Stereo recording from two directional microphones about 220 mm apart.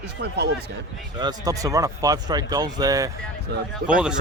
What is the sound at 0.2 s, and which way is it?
Speech, 50° right (ahead or behind).